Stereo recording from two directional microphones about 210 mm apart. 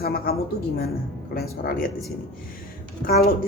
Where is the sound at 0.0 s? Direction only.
45° left (ahead or behind).